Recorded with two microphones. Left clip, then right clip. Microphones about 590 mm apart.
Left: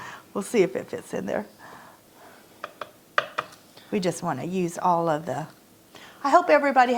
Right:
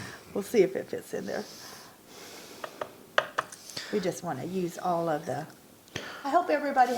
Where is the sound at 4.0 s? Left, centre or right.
Centre.